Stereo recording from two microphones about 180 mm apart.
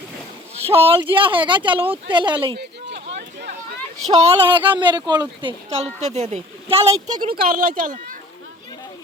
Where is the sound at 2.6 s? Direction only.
65° right (ahead or behind).